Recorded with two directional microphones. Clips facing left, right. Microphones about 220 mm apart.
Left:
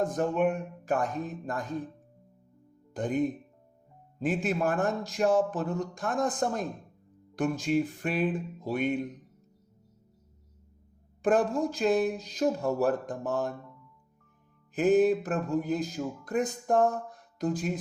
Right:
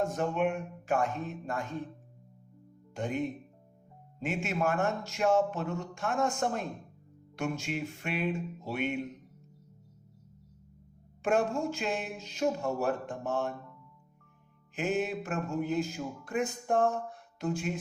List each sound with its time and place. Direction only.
0.0 s speech: 35° left (ahead or behind)
2.9 s speech: 35° left (ahead or behind)
11.2 s speech: 35° left (ahead or behind)
14.8 s speech: 35° left (ahead or behind)